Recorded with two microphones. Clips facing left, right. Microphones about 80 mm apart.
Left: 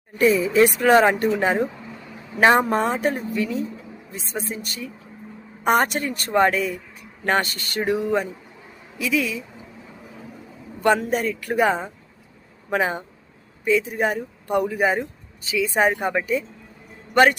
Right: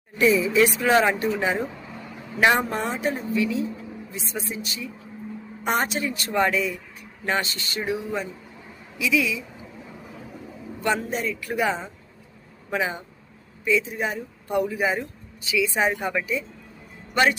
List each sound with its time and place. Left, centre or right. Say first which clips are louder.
0.2 s speech: left 2 dB; left
9.0 s speech: even; left
10.8 s a sound: left 6 dB; left
11.0 s speech: left 4 dB; left